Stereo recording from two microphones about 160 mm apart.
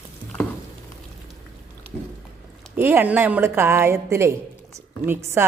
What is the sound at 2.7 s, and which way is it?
A woman's voice, 15° right (ahead or behind).